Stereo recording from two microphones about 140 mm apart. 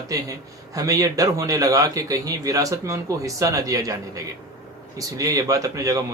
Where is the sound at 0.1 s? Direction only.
25° right (ahead or behind).